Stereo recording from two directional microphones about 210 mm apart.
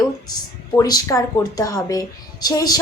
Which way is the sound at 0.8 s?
15° left (ahead or behind).